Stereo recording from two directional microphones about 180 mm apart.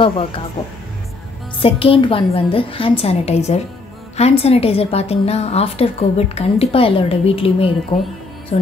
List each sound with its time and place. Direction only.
0.0 s a woman's voice: 30° left (ahead or behind)
1.6 s a woman's voice: 30° left (ahead or behind)